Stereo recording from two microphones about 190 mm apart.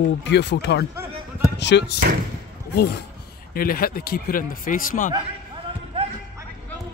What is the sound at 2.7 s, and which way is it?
Speech, 55° left (ahead or behind).